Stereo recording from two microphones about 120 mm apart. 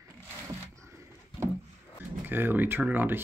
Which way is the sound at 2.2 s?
15° right (ahead or behind).